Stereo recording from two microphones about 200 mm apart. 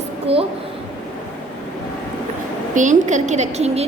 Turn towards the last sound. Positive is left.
turn(degrees=-35)  # may be behind; listen again after turning